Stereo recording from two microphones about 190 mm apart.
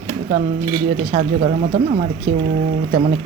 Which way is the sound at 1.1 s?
35° right (ahead or behind).